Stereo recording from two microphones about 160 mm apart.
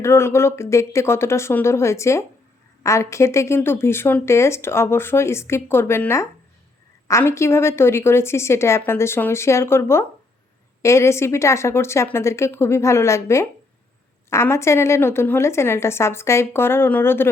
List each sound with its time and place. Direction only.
0.0 s a woman's voice: 15° left (ahead or behind)